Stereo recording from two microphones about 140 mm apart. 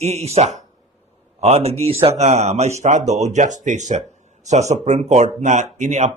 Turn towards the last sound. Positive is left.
turn(degrees=-55)  # may be behind; listen again after turning